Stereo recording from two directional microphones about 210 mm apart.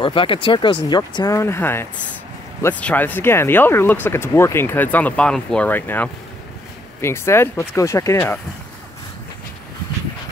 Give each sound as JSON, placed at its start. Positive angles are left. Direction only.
{"t": 0.0, "sound": "speech", "side_deg": 25}